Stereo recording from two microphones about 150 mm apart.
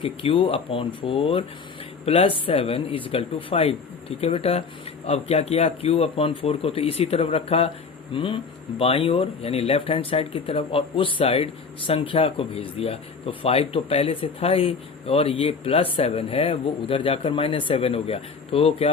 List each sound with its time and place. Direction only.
0.0 s speech: 35° left (ahead or behind)